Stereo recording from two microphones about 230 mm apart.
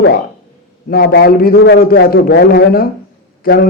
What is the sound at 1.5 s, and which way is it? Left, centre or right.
Speech, left.